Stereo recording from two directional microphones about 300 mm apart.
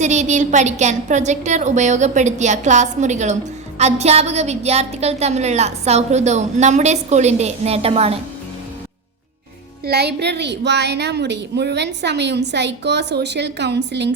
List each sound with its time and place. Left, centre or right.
0.0 s a woman's voice: right
9.8 s a woman's voice: right